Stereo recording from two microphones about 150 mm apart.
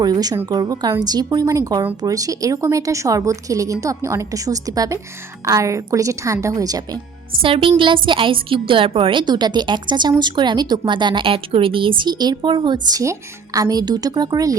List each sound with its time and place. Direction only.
0.0 s a woman's voice: 25° right (ahead or behind)
7.4 s a woman's voice: 35° right (ahead or behind)